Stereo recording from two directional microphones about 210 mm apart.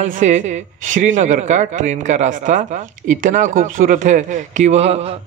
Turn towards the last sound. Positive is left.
turn(degrees=-30)  # may be behind; listen again after turning